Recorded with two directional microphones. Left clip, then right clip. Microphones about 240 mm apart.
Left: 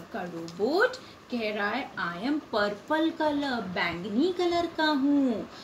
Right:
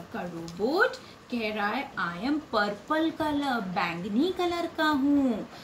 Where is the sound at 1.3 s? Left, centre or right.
Centre.